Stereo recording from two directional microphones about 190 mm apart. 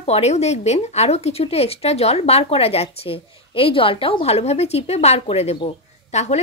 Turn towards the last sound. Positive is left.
turn(degrees=35)  # may be behind; listen again after turning